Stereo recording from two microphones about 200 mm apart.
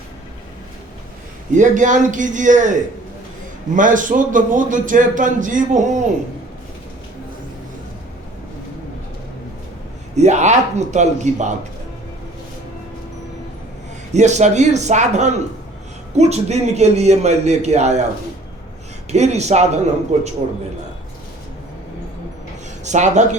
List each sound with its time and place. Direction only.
1.5 s a man's voice: 40° right (ahead or behind)
3.8 s a man's voice: 40° right (ahead or behind)
10.2 s a man's voice: 35° right (ahead or behind)
14.1 s a man's voice: 35° right (ahead or behind)
19.1 s a man's voice: 35° right (ahead or behind)
22.8 s a man's voice: 35° right (ahead or behind)